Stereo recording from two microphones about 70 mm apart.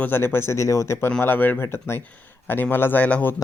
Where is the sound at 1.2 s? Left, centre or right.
Left.